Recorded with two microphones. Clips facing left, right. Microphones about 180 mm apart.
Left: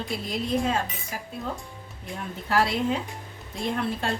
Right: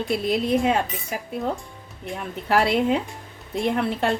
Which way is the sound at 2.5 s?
65° right (ahead or behind).